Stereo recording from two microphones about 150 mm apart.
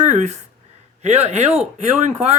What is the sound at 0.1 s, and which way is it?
Speech, 55° right (ahead or behind).